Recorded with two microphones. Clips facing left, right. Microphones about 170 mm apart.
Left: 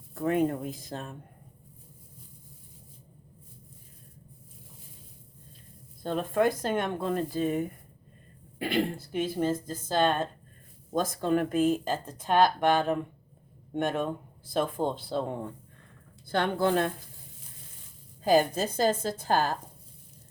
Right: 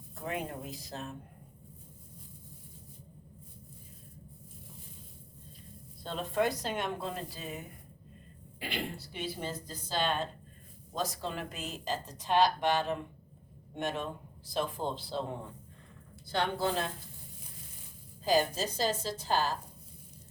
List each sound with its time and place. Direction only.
0.1 s speech: 50° left (ahead or behind)
6.0 s speech: 50° left (ahead or behind)
16.3 s a woman's voice: 55° left (ahead or behind)
18.2 s speech: 55° left (ahead or behind)